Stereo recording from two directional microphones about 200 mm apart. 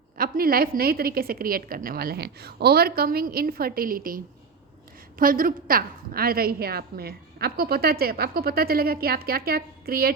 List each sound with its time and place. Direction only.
0.2 s a woman's voice: 45° right (ahead or behind)